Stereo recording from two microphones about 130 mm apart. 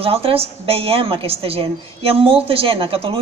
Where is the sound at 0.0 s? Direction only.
45° right (ahead or behind).